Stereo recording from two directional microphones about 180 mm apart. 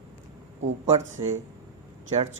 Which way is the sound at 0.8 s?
40° right (ahead or behind).